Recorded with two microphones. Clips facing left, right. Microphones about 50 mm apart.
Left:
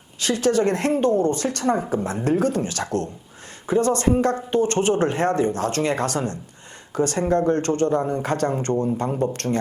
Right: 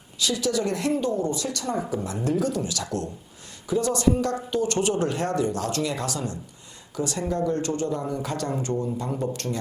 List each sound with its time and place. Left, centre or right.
0.2 s speech: left